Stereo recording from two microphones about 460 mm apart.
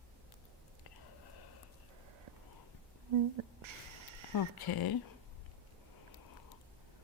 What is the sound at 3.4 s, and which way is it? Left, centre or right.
Speech, right.